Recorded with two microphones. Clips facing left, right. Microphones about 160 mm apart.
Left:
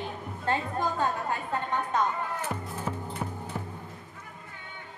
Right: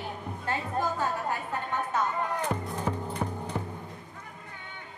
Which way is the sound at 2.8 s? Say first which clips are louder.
Right 3 dB; 15° right (ahead or behind).